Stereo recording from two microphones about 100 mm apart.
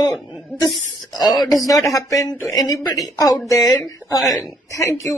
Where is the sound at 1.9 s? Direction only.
35° left (ahead or behind).